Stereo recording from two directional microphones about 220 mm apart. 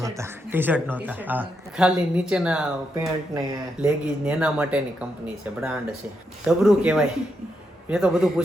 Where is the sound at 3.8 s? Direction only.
5° right (ahead or behind).